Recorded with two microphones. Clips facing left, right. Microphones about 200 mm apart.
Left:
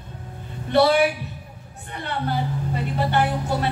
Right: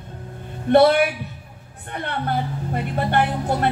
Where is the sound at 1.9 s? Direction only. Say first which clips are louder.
Right 1 dB; 55° right (ahead or behind).